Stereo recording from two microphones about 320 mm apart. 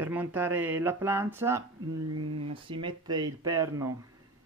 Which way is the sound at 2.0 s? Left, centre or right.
Right.